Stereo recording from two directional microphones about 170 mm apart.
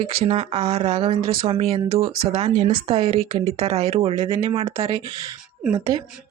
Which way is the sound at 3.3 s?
35° right (ahead or behind).